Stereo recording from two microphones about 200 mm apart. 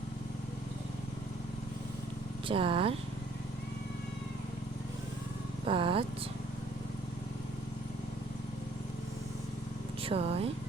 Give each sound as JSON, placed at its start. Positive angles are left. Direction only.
{"t": 2.5, "sound": "speech", "side_deg": -25}
{"t": 5.6, "sound": "speech", "side_deg": -25}
{"t": 10.0, "sound": "speech", "side_deg": -30}